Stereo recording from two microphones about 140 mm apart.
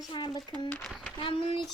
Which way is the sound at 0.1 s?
30° left (ahead or behind).